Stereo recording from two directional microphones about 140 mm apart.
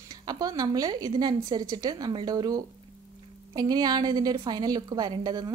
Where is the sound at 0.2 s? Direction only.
25° right (ahead or behind).